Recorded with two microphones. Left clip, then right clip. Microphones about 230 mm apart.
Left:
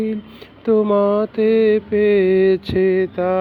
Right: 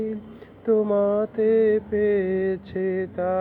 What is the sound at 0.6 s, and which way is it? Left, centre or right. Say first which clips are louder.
Mantra: left 5 dB; left.